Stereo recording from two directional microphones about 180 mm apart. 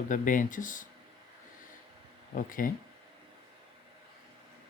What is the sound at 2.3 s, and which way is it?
Speech, 50° left (ahead or behind).